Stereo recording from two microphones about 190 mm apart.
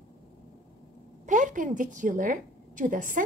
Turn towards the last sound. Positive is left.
turn(degrees=-45)  # may be behind; listen again after turning